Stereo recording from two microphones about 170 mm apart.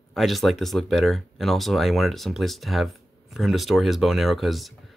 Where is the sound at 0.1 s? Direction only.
Centre (ahead or behind).